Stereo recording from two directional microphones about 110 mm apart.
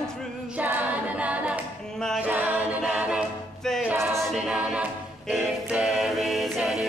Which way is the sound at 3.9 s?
25° right (ahead or behind).